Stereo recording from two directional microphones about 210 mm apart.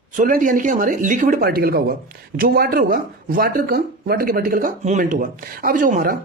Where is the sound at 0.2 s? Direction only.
40° right (ahead or behind).